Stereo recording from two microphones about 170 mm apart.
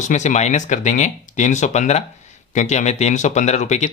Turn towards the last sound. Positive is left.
turn(degrees=45)  # may be behind; listen again after turning